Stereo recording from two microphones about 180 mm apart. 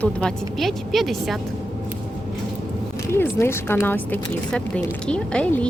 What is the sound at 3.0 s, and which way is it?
Speech, 15° left (ahead or behind).